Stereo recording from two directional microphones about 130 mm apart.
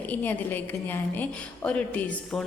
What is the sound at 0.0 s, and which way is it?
A woman's voice, 15° left (ahead or behind).